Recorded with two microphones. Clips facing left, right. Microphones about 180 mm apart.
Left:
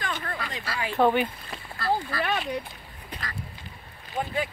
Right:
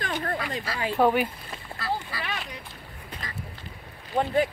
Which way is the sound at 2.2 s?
60° left (ahead or behind).